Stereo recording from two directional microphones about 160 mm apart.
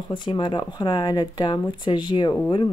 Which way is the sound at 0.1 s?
30° left (ahead or behind).